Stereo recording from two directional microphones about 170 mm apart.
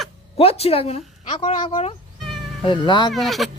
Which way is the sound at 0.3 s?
35° left (ahead or behind).